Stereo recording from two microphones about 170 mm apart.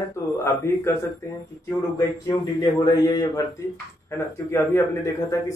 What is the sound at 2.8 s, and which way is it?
Speech, 20° left (ahead or behind).